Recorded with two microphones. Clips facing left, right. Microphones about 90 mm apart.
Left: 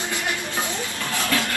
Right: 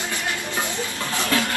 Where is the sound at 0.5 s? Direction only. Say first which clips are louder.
Right 1 dB; 20° right (ahead or behind).